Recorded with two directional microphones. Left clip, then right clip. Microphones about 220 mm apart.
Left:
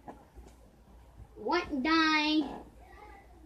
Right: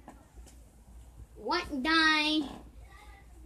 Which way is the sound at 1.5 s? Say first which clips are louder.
Even; 25° right (ahead or behind).